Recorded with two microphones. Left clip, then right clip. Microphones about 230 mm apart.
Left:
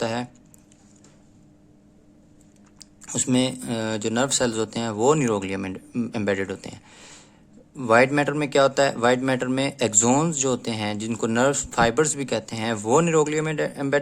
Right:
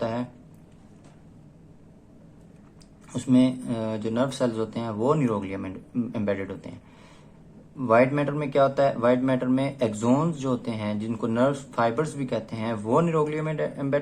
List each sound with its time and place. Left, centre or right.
0.0 s speech: left
2.7 s speech: left